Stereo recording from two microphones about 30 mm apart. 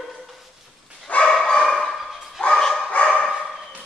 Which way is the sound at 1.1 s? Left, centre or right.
Left.